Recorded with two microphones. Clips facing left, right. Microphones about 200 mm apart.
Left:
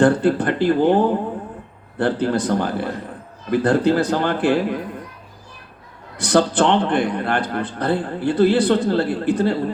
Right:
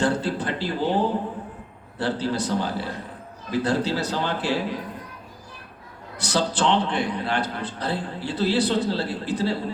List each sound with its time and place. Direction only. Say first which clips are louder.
0.0 s a man's voice: left 8 dB; 55° left (ahead or behind)
6.1 s a man's voice: left 8 dB; 55° left (ahead or behind)